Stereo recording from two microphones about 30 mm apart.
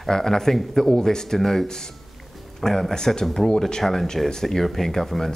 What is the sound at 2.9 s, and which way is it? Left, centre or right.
Speech, left.